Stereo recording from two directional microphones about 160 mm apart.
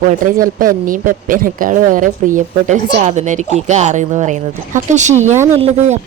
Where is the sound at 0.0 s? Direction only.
55° right (ahead or behind).